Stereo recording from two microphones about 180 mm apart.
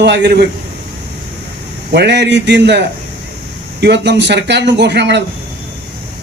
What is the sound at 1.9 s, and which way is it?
A man's voice, 70° right (ahead or behind).